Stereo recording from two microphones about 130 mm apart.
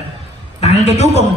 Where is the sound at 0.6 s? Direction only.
60° left (ahead or behind).